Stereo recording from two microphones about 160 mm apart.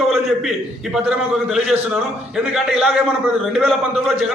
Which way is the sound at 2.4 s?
5° right (ahead or behind).